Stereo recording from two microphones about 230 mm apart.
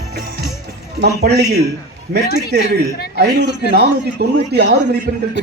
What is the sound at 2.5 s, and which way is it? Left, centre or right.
A man's voice, right.